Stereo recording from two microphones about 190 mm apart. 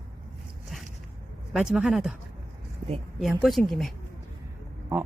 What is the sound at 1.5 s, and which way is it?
Speech, 5° right (ahead or behind).